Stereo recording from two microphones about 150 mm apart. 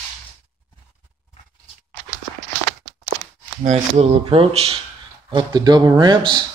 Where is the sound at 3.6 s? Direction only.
45° right (ahead or behind).